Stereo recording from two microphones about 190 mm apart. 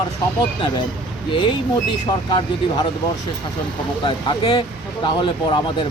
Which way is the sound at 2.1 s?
20° left (ahead or behind).